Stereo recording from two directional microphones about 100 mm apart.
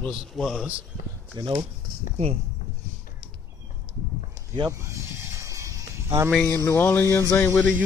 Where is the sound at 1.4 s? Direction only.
45° right (ahead or behind).